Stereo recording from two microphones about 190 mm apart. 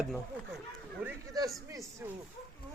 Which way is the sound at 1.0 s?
15° right (ahead or behind).